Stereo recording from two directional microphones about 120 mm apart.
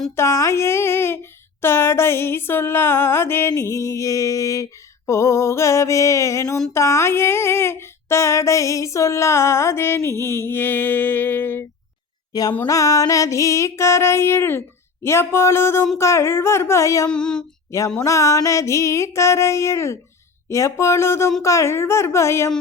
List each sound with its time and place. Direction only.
0.2 s speech: 25° left (ahead or behind)
12.3 s music: 30° left (ahead or behind)
12.6 s speech: 30° left (ahead or behind)
17.1 s female singing: 5° left (ahead or behind)
17.7 s a sound: 25° left (ahead or behind)
18.0 s speech: 25° left (ahead or behind)